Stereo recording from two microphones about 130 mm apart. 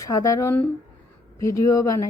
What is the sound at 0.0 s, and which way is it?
Speech, 25° left (ahead or behind).